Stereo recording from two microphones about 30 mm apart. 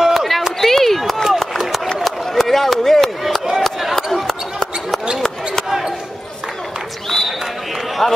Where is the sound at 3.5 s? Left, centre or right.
Centre.